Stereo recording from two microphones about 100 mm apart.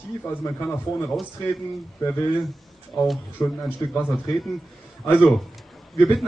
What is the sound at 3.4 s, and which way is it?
Speech, 30° left (ahead or behind).